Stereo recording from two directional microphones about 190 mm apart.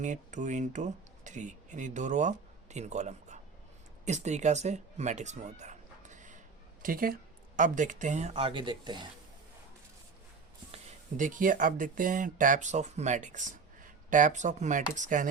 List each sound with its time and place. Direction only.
0.0 s speech: 40° right (ahead or behind); by 9.0 s 25° right (ahead or behind)
11.2 s speech: 45° right (ahead or behind)